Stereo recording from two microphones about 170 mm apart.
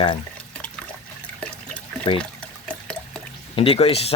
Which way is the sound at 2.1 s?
30° left (ahead or behind).